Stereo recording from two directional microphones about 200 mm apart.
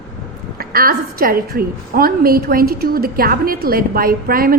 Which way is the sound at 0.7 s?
50° right (ahead or behind).